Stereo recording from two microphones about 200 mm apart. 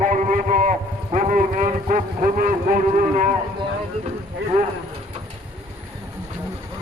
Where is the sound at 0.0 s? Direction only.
40° right (ahead or behind).